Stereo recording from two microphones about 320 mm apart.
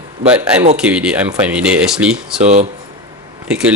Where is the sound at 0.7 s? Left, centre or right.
Centre.